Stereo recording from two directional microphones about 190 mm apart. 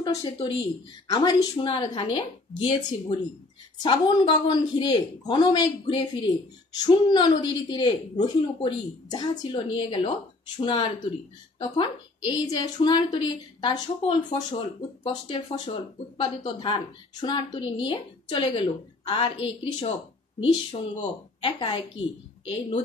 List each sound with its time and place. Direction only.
0.0 s speech: 20° left (ahead or behind)
21.4 s a woman's voice: 25° left (ahead or behind)